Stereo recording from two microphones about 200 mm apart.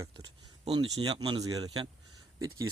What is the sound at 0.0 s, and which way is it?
Speech, 25° right (ahead or behind).